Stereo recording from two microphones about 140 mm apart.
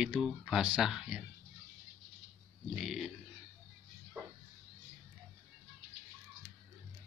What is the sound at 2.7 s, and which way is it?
Pig, centre (ahead or behind).